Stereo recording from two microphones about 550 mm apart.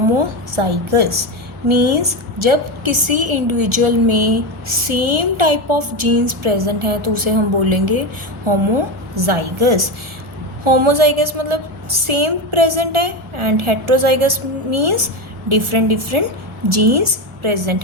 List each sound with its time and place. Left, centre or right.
0.2 s a woman's voice: right
8.4 s a woman's voice: right
10.6 s a woman's voice: right